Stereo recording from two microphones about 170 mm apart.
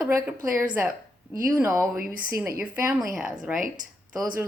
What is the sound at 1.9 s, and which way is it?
Speech, 55° right (ahead or behind).